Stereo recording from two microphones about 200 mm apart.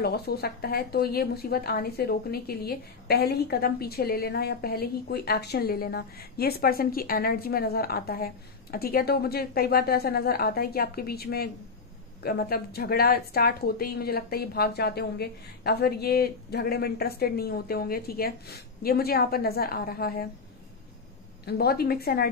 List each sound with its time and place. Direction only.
0.0 s a woman's voice: 55° left (ahead or behind)
21.5 s a woman's voice: 50° left (ahead or behind)